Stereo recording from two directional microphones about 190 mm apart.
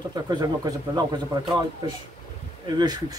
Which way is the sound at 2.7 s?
20° right (ahead or behind).